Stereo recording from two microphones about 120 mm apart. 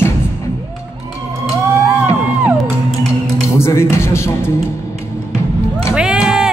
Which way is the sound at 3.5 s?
20° left (ahead or behind).